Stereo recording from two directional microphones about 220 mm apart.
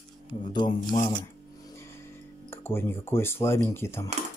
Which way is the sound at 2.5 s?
10° left (ahead or behind).